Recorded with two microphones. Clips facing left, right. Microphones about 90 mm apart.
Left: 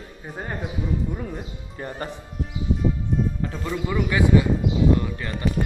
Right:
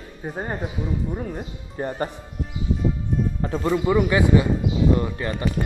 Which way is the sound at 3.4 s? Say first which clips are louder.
Right 5 dB; 35° right (ahead or behind).